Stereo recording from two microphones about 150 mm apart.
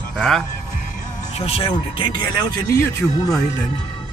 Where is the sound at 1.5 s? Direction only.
40° left (ahead or behind).